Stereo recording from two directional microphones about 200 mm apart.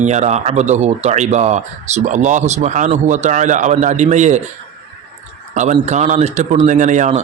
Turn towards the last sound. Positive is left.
turn(degrees=-35)  # may be behind; listen again after turning